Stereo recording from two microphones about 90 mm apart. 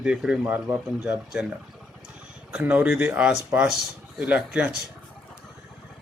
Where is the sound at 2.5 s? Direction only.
15° right (ahead or behind).